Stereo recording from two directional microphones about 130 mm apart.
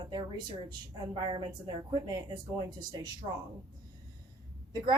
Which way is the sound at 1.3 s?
35° right (ahead or behind).